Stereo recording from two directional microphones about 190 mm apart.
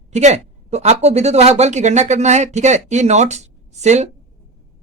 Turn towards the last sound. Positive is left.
turn(degrees=-35)  # may be behind; listen again after turning